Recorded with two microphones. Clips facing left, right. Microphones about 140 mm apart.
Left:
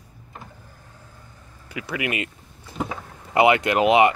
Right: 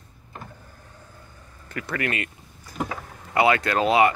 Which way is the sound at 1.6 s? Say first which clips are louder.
Even; 10° left (ahead or behind).